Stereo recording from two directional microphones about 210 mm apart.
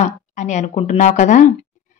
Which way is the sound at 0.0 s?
35° left (ahead or behind).